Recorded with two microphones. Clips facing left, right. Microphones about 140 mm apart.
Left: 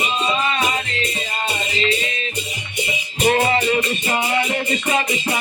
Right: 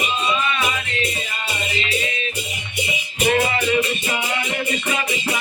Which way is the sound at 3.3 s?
40° left (ahead or behind).